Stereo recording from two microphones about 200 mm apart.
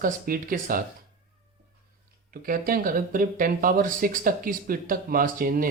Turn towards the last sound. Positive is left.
turn(degrees=-45)  # may be behind; listen again after turning